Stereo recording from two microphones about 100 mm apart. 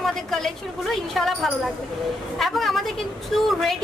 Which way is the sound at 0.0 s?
5° left (ahead or behind).